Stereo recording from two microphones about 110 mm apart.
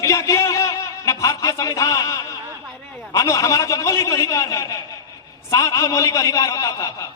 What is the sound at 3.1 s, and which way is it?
A woman's voice, 30° left (ahead or behind).